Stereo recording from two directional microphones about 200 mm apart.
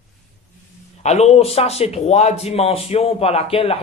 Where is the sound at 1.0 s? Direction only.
35° left (ahead or behind).